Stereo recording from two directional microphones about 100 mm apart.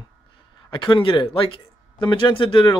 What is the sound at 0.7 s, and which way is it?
Speech, 50° left (ahead or behind).